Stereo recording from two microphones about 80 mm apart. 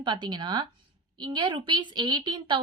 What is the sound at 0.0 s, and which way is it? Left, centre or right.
A woman's voice, right.